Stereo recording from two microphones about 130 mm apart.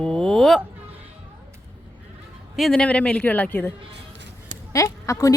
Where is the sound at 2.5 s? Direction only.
5° left (ahead or behind).